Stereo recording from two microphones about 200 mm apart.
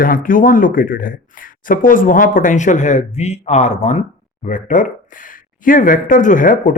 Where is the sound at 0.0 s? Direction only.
45° left (ahead or behind).